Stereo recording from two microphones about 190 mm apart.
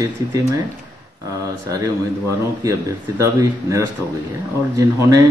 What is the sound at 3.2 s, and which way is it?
Speech, 15° right (ahead or behind).